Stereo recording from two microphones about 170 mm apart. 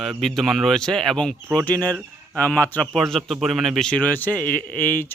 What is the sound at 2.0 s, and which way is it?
Speech, 15° right (ahead or behind).